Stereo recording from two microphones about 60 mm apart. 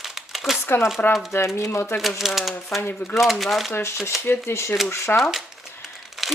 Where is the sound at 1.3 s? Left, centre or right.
Left.